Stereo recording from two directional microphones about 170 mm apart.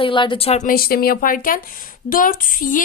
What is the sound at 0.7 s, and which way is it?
Speech, 60° left (ahead or behind).